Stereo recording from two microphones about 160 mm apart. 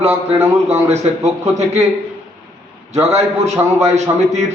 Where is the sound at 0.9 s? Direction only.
40° right (ahead or behind).